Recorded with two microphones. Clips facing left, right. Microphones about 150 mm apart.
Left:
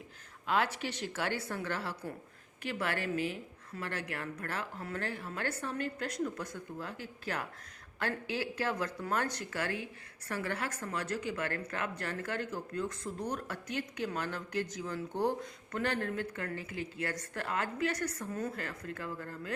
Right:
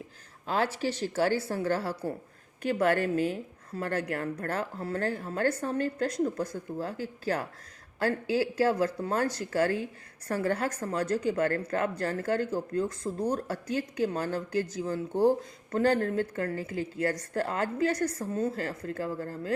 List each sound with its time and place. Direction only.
0.4 s a woman's voice: 35° right (ahead or behind)